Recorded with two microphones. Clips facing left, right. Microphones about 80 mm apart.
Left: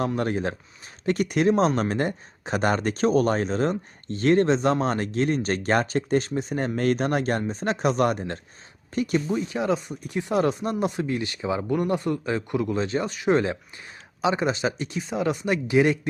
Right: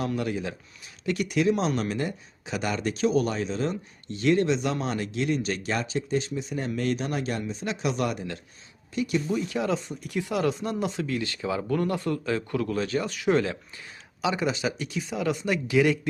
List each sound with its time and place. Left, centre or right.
0.2 s speech: left
9.2 s speech: left